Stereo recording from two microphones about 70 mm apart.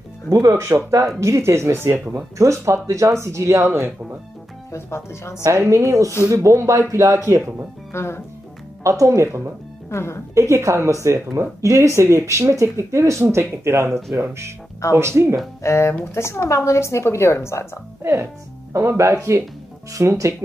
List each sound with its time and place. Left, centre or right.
0.5 s speech: right
4.7 s a woman's voice: left
5.4 s speech: right
7.9 s speech: left
8.8 s speech: right
9.8 s speech: left
10.5 s speech: right
13.2 s speech: right
15.0 s speech: right
15.6 s speech: left
15.9 s a woman's voice: left
18.0 s speech: right